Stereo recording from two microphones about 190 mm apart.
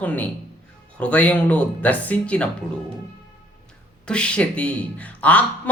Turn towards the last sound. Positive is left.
turn(degrees=5)  # may be behind; listen again after turning